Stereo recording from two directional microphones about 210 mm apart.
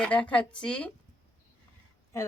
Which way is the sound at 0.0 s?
5° left (ahead or behind).